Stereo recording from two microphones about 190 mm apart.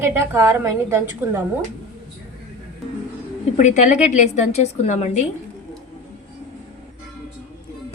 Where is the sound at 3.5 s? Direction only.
40° left (ahead or behind).